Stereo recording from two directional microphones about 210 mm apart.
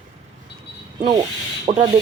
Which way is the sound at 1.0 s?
20° right (ahead or behind).